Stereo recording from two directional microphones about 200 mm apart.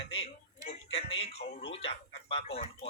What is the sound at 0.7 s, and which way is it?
Music, 30° left (ahead or behind).